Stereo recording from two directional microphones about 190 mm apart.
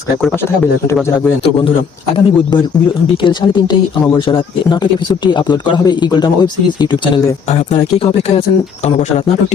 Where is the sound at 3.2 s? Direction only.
25° left (ahead or behind).